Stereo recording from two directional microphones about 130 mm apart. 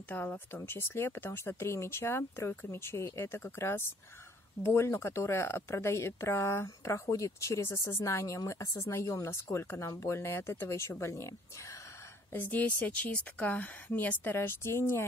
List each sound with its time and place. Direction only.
0.1 s a woman's voice: 15° left (ahead or behind)